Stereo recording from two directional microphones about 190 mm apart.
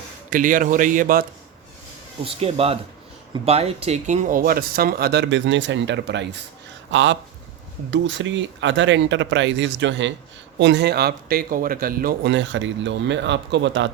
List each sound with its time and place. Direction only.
0.3 s speech: 45° right (ahead or behind)
2.2 s a man's voice: 30° right (ahead or behind); by 13.9 s 70° right (ahead or behind)